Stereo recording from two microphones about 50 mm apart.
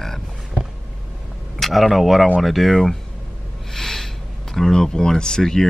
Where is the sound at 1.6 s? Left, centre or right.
Centre.